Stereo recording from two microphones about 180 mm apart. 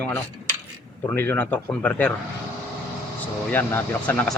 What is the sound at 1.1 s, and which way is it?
Speech, 10° left (ahead or behind).